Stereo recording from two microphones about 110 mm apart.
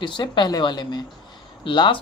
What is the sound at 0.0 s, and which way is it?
A woman's voice, 45° left (ahead or behind).